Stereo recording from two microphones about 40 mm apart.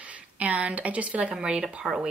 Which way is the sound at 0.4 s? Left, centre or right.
Right.